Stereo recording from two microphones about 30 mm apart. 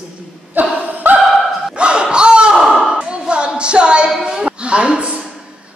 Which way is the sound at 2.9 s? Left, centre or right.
Right.